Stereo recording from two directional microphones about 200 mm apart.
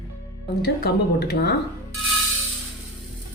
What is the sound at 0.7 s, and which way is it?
Speech, 50° left (ahead or behind).